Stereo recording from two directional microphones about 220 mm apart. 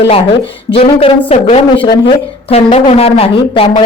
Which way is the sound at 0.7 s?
25° left (ahead or behind).